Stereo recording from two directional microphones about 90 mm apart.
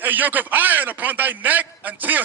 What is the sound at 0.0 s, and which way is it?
Speech, 20° right (ahead or behind).